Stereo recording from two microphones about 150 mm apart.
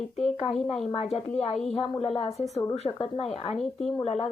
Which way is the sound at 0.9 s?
40° left (ahead or behind).